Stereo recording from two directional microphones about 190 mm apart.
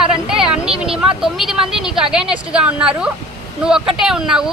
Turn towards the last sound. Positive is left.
turn(degrees=-5)  # may be behind; listen again after turning